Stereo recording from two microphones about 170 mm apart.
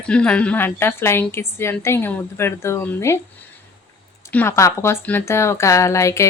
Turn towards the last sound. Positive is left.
turn(degrees=15)  # may be behind; listen again after turning